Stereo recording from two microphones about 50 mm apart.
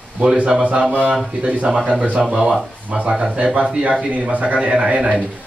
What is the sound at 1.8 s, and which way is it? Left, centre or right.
A man's voice, right.